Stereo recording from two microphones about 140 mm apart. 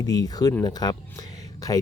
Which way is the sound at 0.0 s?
25° left (ahead or behind).